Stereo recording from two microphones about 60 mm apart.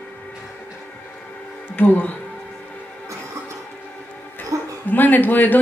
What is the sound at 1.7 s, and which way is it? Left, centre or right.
Speech, left.